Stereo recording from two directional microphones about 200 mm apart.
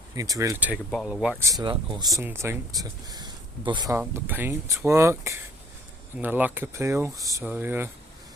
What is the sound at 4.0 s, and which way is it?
Speech, 10° right (ahead or behind).